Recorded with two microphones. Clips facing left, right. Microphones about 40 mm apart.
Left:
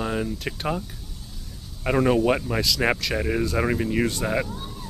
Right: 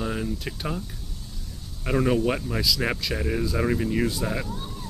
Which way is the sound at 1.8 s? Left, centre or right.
Centre.